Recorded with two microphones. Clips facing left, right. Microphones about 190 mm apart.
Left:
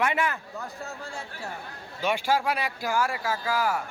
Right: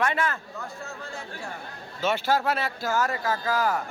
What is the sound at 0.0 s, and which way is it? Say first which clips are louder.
Speech: even; 15° left (ahead or behind).